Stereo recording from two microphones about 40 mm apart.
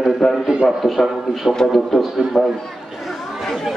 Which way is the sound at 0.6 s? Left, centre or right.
Centre.